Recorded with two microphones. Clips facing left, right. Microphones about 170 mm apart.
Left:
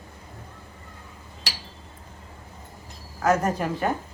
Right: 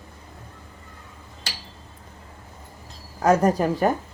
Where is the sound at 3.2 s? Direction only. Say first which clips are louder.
Right 4 dB; 35° right (ahead or behind).